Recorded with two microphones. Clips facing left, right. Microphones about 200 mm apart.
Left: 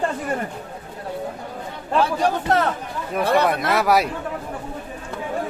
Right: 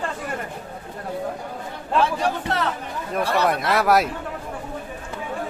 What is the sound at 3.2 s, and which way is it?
Speech, 55° left (ahead or behind).